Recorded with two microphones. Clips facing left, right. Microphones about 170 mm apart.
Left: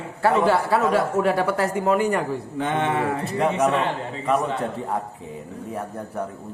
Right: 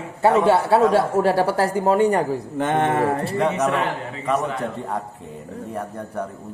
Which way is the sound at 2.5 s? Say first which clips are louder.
Right 3 dB; 50° right (ahead or behind).